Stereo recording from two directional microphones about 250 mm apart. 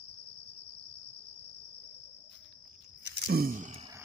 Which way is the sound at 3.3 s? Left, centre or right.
Right.